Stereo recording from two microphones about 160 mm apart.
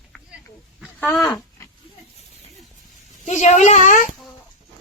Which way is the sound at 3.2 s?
45° left (ahead or behind).